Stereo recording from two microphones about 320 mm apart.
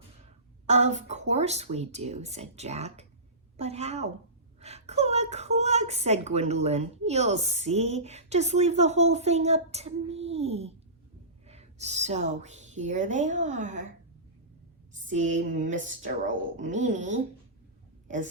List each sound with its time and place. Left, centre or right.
0.7 s a woman's voice: right
14.9 s a woman's voice: right